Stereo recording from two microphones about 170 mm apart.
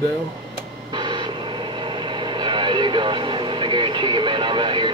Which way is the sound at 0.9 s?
25° right (ahead or behind).